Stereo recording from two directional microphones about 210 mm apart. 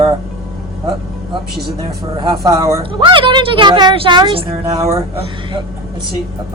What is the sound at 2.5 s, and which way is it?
A woman's voice, 15° right (ahead or behind).